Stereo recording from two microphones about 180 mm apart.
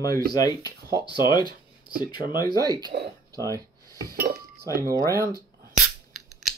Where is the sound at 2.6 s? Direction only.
20° right (ahead or behind).